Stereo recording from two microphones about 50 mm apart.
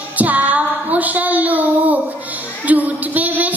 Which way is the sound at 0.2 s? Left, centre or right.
Right.